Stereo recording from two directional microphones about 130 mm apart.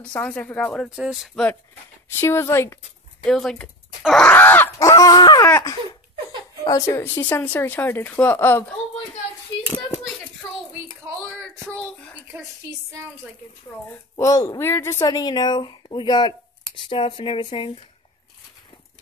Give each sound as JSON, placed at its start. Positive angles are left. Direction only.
{"t": 0.1, "sound": "a woman's voice", "side_deg": 10}
{"t": 0.8, "sound": "speech", "side_deg": -5}
{"t": 2.0, "sound": "speech", "side_deg": 20}
{"t": 3.3, "sound": "a woman's voice", "side_deg": 5}
{"t": 4.7, "sound": "speech", "side_deg": 25}
{"t": 6.6, "sound": "speech", "side_deg": 25}
{"t": 7.2, "sound": "a woman's voice", "side_deg": 15}
{"t": 9.6, "sound": "hands", "side_deg": 5}
{"t": 11.2, "sound": "a sound", "side_deg": 5}
{"t": 13.8, "sound": "a woman's voice", "side_deg": 20}